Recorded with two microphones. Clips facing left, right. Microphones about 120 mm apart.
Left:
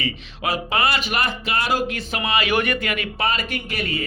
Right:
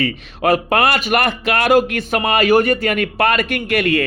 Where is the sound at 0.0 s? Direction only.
55° right (ahead or behind).